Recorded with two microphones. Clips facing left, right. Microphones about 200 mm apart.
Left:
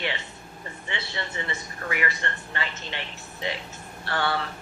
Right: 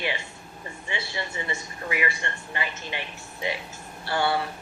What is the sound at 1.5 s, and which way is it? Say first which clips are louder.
Speech: right 1 dB; 20° right (ahead or behind).